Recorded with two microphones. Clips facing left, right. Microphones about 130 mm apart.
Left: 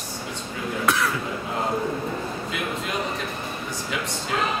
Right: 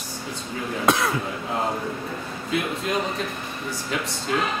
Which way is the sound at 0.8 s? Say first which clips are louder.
Right 2 dB; 30° right (ahead or behind).